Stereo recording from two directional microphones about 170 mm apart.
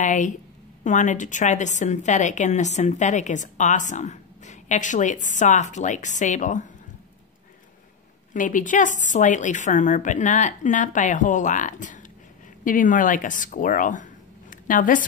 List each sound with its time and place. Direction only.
0.0 s a woman's voice: 45° left (ahead or behind)
8.3 s a woman's voice: 50° left (ahead or behind)